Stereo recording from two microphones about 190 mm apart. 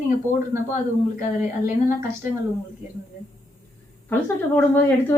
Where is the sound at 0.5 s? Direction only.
15° right (ahead or behind).